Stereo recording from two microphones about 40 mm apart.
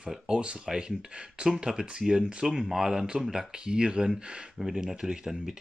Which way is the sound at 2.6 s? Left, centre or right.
Centre.